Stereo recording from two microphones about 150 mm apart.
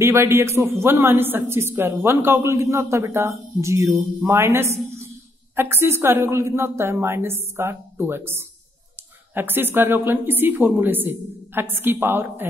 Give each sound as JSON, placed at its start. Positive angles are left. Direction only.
{"t": 0.0, "sound": "a man's voice", "side_deg": -15}